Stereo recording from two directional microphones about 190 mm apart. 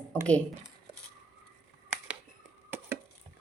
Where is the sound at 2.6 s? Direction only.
10° right (ahead or behind).